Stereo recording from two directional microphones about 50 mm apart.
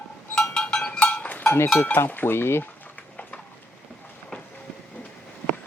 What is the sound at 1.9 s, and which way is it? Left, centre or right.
Stir, left.